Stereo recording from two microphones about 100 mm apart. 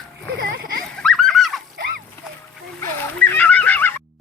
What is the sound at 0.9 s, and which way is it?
Goat, 5° left (ahead or behind).